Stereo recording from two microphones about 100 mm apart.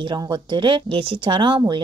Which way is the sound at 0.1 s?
50° right (ahead or behind).